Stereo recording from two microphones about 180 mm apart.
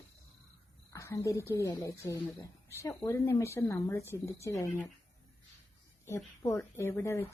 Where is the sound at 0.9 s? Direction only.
15° left (ahead or behind).